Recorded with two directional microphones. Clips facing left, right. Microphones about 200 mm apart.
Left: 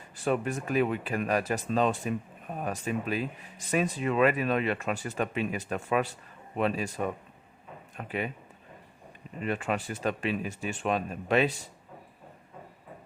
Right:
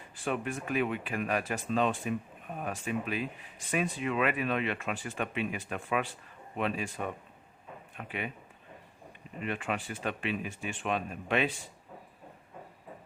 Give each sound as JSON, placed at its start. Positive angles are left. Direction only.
{"t": 0.3, "sound": "speech", "side_deg": 40}
{"t": 9.4, "sound": "speech", "side_deg": 40}